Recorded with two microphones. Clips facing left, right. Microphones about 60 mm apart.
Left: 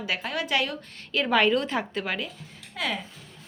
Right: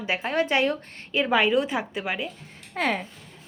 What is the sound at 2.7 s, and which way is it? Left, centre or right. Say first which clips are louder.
Speech: right 5 dB; right.